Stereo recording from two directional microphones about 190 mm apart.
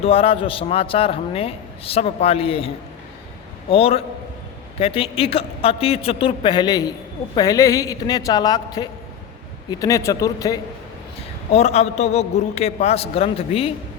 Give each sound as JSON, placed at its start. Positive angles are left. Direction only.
{"t": 0.0, "sound": "a man's voice", "side_deg": 30}
{"t": 11.5, "sound": "a man's voice", "side_deg": 35}